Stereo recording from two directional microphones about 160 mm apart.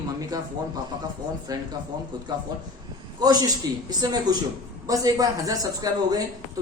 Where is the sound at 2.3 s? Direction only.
25° right (ahead or behind).